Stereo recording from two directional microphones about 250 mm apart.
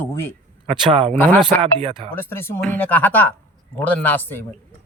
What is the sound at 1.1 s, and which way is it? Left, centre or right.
Speech, centre.